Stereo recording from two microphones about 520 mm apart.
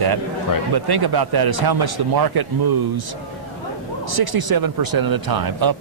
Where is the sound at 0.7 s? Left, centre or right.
Right.